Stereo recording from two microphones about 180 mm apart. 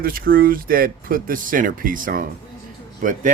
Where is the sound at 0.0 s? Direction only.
55° right (ahead or behind).